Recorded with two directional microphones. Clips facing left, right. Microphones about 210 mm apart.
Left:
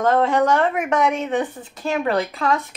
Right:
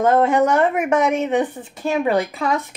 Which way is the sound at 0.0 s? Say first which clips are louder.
Right 2 dB; 5° right (ahead or behind).